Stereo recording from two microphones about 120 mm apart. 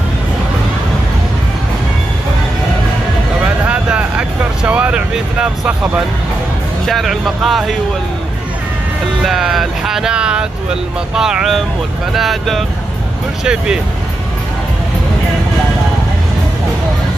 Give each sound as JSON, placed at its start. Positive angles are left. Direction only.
{"t": 3.4, "sound": "vehicle", "side_deg": -10}
{"t": 6.9, "sound": "speech", "side_deg": 0}
{"t": 9.2, "sound": "speech", "side_deg": 0}